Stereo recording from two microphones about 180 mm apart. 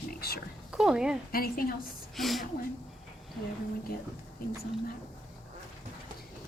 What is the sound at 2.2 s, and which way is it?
Speech, centre (ahead or behind).